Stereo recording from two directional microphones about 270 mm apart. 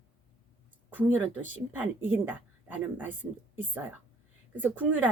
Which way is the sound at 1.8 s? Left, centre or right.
Centre.